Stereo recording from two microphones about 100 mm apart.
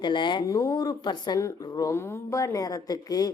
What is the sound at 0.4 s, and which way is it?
Speech, 35° left (ahead or behind).